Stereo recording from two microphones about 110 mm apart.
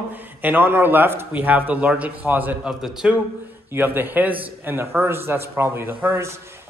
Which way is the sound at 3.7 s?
20° right (ahead or behind).